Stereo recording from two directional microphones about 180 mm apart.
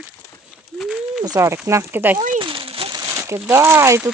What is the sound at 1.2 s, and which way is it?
Speech, 20° right (ahead or behind).